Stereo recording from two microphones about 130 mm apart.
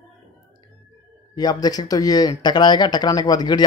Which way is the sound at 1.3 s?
30° left (ahead or behind).